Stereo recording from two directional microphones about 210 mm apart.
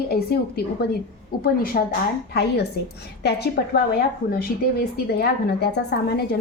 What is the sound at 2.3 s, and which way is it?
A woman's voice, 50° left (ahead or behind).